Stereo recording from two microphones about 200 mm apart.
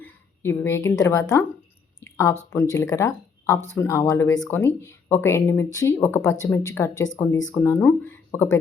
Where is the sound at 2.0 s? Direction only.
15° left (ahead or behind).